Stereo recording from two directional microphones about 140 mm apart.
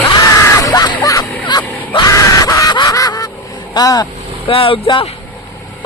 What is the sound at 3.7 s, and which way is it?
Speech, 25° left (ahead or behind).